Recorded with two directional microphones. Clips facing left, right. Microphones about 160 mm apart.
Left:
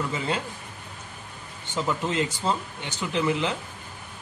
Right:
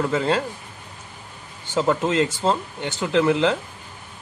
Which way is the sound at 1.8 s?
90° right.